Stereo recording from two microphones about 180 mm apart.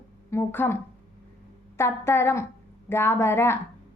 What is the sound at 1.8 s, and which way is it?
A woman's voice, 15° left (ahead or behind).